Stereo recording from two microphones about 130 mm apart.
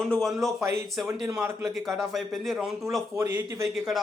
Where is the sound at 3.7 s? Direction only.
Centre (ahead or behind).